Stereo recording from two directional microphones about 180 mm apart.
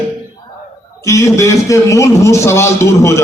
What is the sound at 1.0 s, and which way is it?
A man's voice, 15° left (ahead or behind).